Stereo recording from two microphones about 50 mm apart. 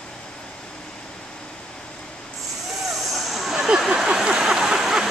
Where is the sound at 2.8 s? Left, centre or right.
Centre.